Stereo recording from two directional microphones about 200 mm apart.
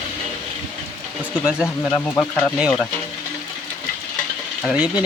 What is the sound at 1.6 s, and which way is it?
Speech, 10° left (ahead or behind).